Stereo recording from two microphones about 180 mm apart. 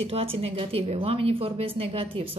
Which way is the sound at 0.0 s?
35° right (ahead or behind).